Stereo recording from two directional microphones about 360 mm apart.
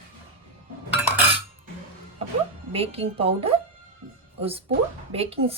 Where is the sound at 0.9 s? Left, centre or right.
Centre.